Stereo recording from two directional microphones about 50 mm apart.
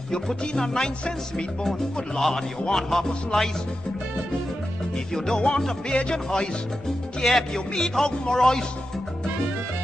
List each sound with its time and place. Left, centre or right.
0.4 s music: centre
4.9 s music: centre